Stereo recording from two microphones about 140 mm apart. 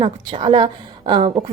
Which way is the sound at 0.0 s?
40° right (ahead or behind).